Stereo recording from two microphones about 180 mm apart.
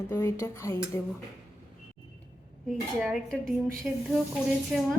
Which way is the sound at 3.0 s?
Centre (ahead or behind).